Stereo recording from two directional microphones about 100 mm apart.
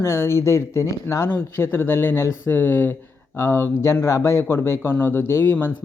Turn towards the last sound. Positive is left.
turn(degrees=25)  # may be behind; listen again after turning